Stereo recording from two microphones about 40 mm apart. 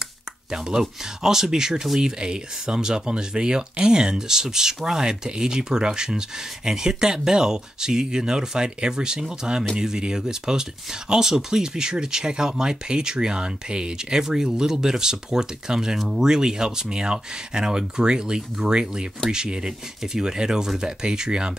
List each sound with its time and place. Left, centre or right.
0.5 s speech: centre
16.0 s speech: centre
16.3 s speech: centre